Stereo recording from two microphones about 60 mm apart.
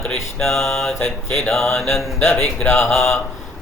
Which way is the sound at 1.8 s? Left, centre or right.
Left.